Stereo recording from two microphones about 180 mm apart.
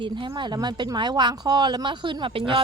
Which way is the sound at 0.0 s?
25° right (ahead or behind).